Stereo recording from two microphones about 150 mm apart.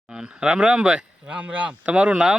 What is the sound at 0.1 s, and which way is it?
A man's voice, 5° right (ahead or behind).